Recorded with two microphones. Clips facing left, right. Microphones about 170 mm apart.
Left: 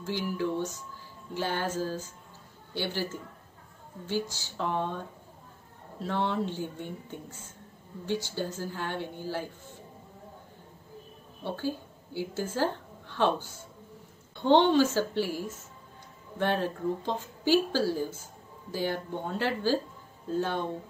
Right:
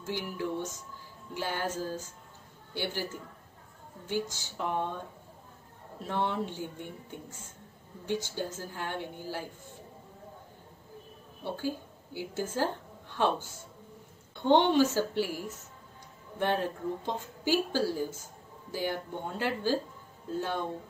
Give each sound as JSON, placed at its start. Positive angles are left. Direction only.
{"t": 0.1, "sound": "a woman's voice", "side_deg": -15}
{"t": 4.1, "sound": "a woman's voice", "side_deg": -15}
{"t": 6.0, "sound": "a woman's voice", "side_deg": -15}
{"t": 8.1, "sound": "a woman's voice", "side_deg": -15}
{"t": 11.4, "sound": "a woman's voice", "side_deg": -10}
{"t": 14.5, "sound": "a woman's voice", "side_deg": -15}